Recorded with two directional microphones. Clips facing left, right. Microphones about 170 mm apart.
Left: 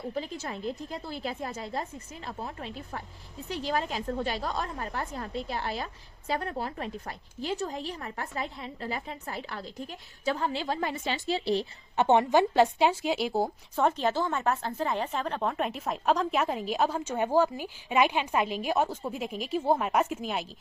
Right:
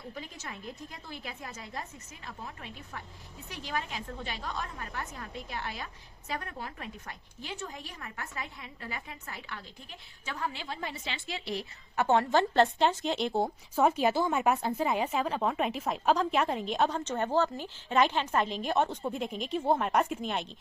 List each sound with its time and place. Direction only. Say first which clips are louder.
0.1 s a woman's voice: left 7 dB; 35° left (ahead or behind)
10.8 s a woman's voice: left 7 dB; 50° left (ahead or behind)
11.3 s a woman's voice: left 9 dB; 30° left (ahead or behind); by 20.5 s 5° left (ahead or behind)